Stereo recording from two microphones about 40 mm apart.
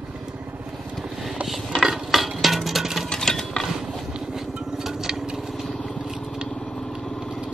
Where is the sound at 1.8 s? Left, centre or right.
Centre.